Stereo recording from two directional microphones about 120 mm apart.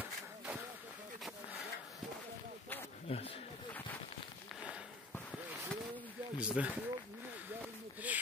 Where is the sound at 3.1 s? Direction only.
55° left (ahead or behind).